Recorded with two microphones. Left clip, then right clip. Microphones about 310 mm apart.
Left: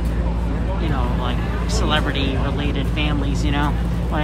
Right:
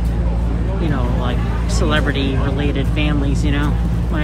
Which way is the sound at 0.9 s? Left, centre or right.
Centre.